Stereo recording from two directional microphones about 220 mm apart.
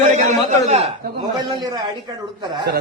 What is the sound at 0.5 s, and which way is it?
Speech, 30° right (ahead or behind).